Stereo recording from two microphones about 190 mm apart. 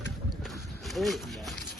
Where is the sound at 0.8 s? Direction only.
Centre (ahead or behind).